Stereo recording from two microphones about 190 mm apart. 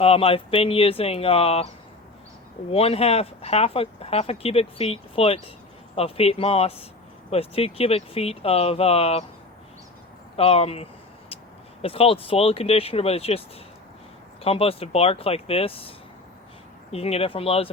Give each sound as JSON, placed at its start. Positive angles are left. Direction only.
{"t": 0.0, "sound": "speech", "side_deg": 30}
{"t": 2.6, "sound": "speech", "side_deg": 30}
{"t": 10.3, "sound": "speech", "side_deg": 30}
{"t": 14.4, "sound": "speech", "side_deg": 30}
{"t": 16.9, "sound": "speech", "side_deg": 30}